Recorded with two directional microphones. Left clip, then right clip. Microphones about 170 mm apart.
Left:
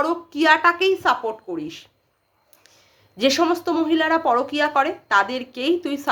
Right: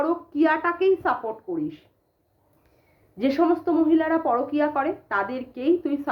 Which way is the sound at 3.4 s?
25° left (ahead or behind).